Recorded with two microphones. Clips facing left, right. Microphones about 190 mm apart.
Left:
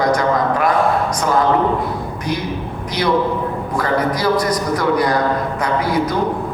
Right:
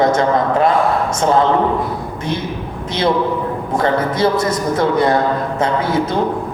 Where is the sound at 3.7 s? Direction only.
25° right (ahead or behind).